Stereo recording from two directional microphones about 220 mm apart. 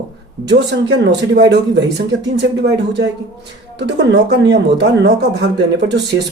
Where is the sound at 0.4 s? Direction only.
50° right (ahead or behind).